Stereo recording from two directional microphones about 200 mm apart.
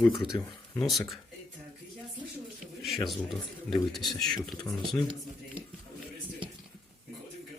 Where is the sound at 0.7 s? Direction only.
Centre (ahead or behind).